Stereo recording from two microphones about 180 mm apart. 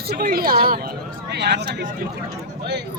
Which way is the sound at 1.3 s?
65° right (ahead or behind).